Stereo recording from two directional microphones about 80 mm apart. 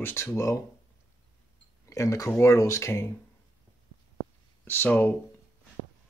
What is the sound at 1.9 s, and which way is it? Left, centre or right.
Speech, left.